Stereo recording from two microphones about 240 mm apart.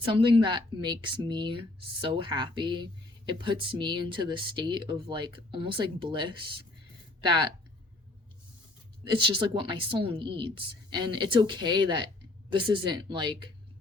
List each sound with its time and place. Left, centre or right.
0.1 s speech: right
9.0 s speech: right